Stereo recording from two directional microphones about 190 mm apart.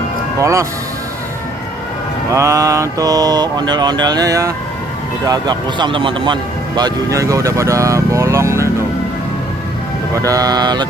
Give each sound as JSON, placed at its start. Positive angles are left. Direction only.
{"t": 0.3, "sound": "speech", "side_deg": -15}
{"t": 2.3, "sound": "mantra", "side_deg": -15}
{"t": 5.2, "sound": "speech", "side_deg": -20}
{"t": 10.2, "sound": "mantra", "side_deg": -15}